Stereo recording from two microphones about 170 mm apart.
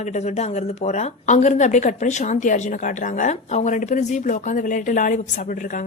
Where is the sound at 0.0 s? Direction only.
40° left (ahead or behind).